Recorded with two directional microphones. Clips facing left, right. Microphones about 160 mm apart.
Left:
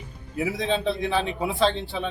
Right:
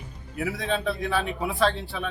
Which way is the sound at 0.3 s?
20° left (ahead or behind).